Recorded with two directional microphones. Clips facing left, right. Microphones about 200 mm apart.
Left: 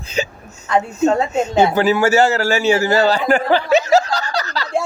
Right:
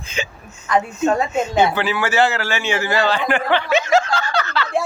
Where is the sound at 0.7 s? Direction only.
25° left (ahead or behind).